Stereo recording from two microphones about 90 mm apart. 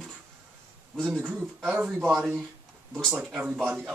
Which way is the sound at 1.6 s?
20° right (ahead or behind).